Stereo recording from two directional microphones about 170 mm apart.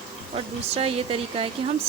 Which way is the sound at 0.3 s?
35° right (ahead or behind).